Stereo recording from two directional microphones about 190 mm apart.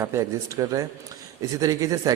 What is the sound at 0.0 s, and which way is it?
A man's voice, 15° right (ahead or behind).